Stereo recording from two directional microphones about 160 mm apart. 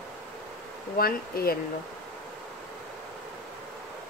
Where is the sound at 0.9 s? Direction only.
70° left (ahead or behind).